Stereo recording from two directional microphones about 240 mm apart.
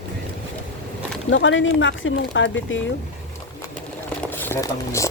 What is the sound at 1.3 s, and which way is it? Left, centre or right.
Speech, left.